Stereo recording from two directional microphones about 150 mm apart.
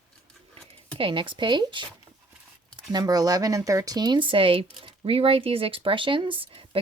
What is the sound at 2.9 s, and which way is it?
Speech, 25° right (ahead or behind).